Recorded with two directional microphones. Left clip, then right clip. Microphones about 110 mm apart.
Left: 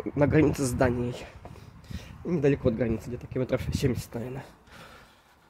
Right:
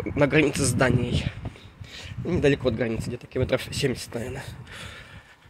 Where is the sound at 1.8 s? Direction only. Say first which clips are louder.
Right 4 dB; 30° left (ahead or behind).